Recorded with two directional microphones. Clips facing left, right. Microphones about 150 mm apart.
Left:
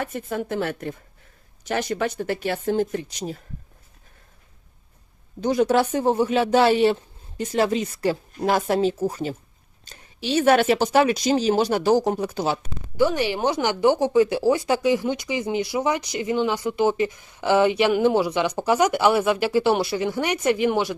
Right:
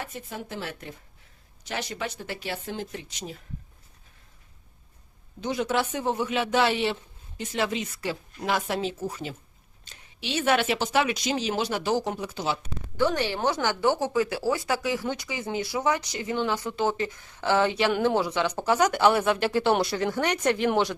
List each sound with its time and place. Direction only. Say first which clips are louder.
0.0 s speech: left 9 dB; 55° left (ahead or behind); by 3.4 s 40° left (ahead or behind)
5.4 s speech: left 7 dB; 40° left (ahead or behind)
13.0 s speech: left 4 dB; 10° left (ahead or behind)